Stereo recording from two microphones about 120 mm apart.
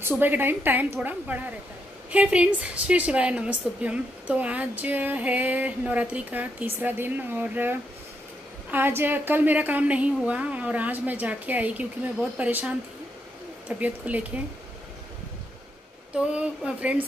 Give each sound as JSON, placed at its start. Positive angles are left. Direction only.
{"t": 0.0, "sound": "a woman's voice", "side_deg": -15}
{"t": 16.2, "sound": "a woman's voice", "side_deg": -10}